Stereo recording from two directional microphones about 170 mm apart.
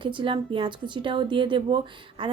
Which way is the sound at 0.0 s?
30° right (ahead or behind).